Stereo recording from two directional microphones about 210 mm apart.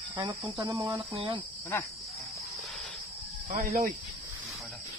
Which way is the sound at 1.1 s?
25° right (ahead or behind).